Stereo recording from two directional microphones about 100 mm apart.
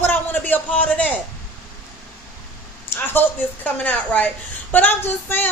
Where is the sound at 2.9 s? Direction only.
20° left (ahead or behind).